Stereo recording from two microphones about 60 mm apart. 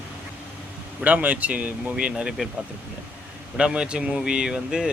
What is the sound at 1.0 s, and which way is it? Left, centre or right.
A man's voice, right.